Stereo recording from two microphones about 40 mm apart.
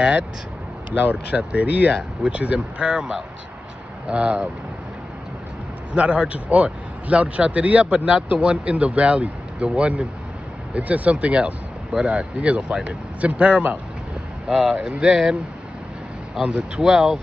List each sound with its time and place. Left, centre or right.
0.9 s a man's voice: right
5.9 s a man's voice: right
14.5 s speech: centre
16.4 s speech: right